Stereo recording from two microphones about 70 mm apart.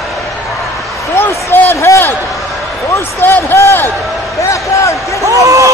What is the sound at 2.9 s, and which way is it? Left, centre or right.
Speech, left.